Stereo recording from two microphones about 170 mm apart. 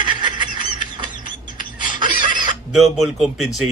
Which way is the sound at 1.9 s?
30° right (ahead or behind).